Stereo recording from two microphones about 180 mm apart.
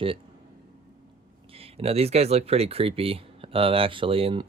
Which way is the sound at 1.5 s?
35° right (ahead or behind).